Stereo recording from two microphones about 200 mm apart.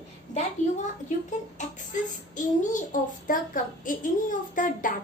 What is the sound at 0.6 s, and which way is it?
Speech, 35° left (ahead or behind).